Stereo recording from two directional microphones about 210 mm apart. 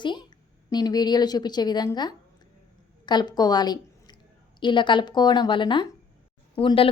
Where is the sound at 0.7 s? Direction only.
20° left (ahead or behind).